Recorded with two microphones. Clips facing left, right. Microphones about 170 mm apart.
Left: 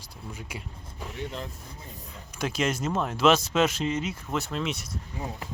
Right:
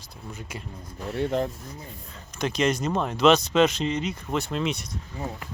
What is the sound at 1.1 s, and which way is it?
Speech, 60° right (ahead or behind).